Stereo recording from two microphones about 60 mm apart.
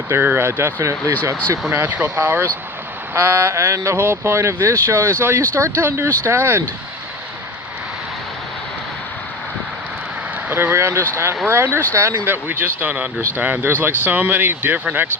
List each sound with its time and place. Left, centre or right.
0.1 s speech: right
1.7 s speech: right
10.5 s speech: right